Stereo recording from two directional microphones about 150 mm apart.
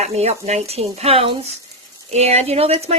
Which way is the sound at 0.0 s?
45° right (ahead or behind).